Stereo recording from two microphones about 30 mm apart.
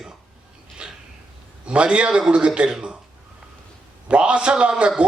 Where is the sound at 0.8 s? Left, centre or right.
Right.